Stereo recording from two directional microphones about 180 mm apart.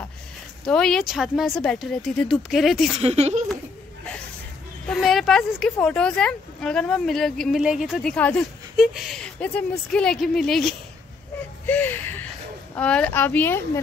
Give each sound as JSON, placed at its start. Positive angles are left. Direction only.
{"t": 0.7, "sound": "speech", "side_deg": 5}
{"t": 3.0, "sound": "speech", "side_deg": -35}
{"t": 4.8, "sound": "speech", "side_deg": 0}
{"t": 11.6, "sound": "whimper", "side_deg": 10}
{"t": 12.7, "sound": "a woman's voice", "side_deg": 5}